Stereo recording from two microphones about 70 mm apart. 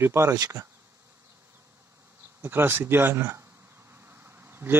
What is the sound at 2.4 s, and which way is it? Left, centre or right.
Speech, right.